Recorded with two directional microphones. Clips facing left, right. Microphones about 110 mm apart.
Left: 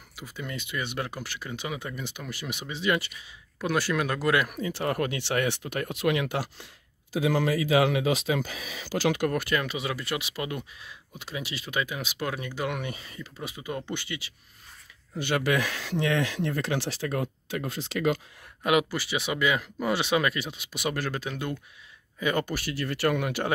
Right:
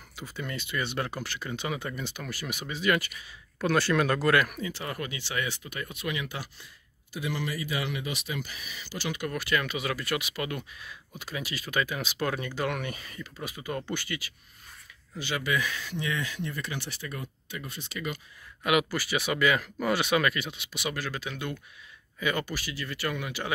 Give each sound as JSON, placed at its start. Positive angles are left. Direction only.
{"t": 0.1, "sound": "speech", "side_deg": 10}
{"t": 3.5, "sound": "speech", "side_deg": 10}
{"t": 4.5, "sound": "speech", "side_deg": 35}
{"t": 4.7, "sound": "speech", "side_deg": 55}
{"t": 7.2, "sound": "speech", "side_deg": 90}
{"t": 9.3, "sound": "speech", "side_deg": 45}
{"t": 9.6, "sound": "speech", "side_deg": 30}
{"t": 15.1, "sound": "speech", "side_deg": 55}
{"t": 18.6, "sound": "speech", "side_deg": 30}
{"t": 22.5, "sound": "speech", "side_deg": 55}